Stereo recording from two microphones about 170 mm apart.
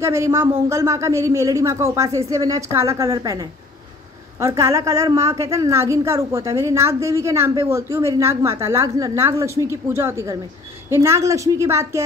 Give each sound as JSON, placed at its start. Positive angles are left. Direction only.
{"t": 0.0, "sound": "a woman's voice", "side_deg": -15}